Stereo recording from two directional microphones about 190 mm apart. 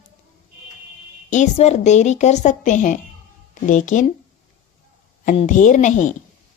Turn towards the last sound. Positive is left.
turn(degrees=40)  # may be behind; listen again after turning